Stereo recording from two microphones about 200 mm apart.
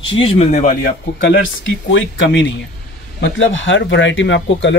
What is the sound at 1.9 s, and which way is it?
Speech, 65° left (ahead or behind).